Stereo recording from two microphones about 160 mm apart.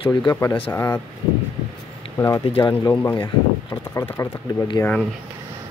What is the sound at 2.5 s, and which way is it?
Speech, 30° left (ahead or behind).